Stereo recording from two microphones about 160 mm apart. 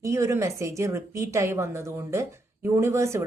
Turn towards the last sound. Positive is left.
turn(degrees=-20)  # may be behind; listen again after turning